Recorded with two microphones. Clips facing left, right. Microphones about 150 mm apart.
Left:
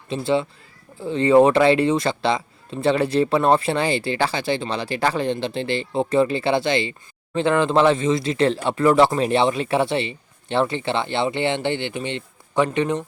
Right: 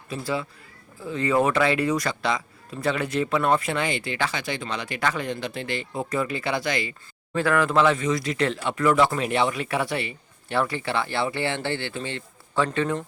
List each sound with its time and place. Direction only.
0.1 s speech: 25° left (ahead or behind)